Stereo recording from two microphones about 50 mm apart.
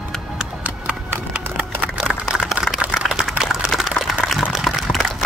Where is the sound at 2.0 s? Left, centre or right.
Centre.